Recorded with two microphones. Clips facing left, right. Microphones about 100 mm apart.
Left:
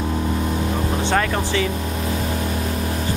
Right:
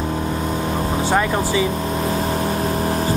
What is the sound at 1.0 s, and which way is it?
Speech, 15° right (ahead or behind).